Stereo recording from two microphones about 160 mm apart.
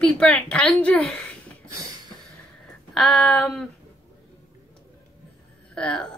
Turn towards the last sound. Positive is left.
turn(degrees=5)  # may be behind; listen again after turning